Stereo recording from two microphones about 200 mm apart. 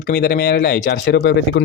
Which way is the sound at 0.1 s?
55° left (ahead or behind).